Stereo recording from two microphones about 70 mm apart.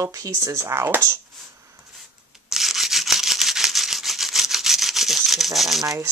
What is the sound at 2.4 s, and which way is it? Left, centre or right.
Toothbrush, centre.